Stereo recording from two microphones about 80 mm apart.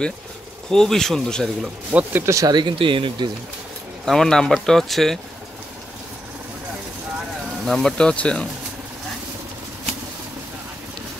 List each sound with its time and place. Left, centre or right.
0.7 s speech: centre
1.9 s speech: right
2.5 s speech: right
4.0 s speech: centre
7.6 s speech: centre